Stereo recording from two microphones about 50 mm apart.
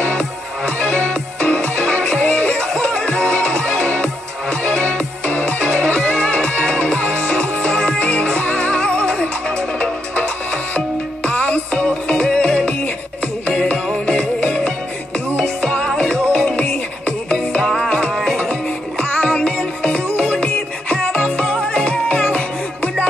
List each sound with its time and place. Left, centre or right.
0.0 s music: left
2.6 s music: centre
8.7 s music: centre
10.1 s music: left
17.6 s music: centre; by 20.4 s left
21.2 s music: centre